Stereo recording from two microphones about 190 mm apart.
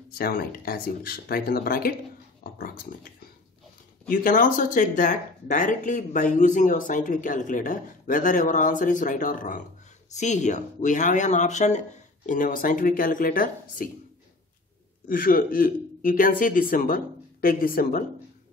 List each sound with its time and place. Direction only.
0.2 s speech: 50° left (ahead or behind)
4.1 s speech: 45° left (ahead or behind)
15.0 s speech: 50° left (ahead or behind)